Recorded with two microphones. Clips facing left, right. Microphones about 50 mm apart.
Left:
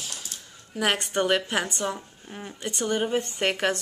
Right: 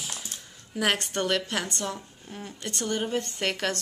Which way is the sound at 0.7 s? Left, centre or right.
Centre.